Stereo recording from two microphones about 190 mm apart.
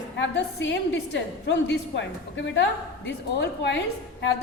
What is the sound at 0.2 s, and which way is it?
A woman's voice, 65° left (ahead or behind).